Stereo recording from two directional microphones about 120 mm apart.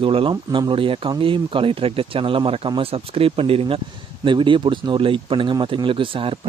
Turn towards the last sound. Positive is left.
turn(degrees=-45)  # may be behind; listen again after turning